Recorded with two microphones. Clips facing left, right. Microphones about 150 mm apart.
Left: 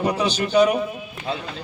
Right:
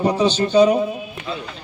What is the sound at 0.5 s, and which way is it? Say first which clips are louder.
Speech: right 3 dB; 30° right (ahead or behind).